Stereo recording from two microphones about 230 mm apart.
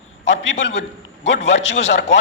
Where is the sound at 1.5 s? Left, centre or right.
Left.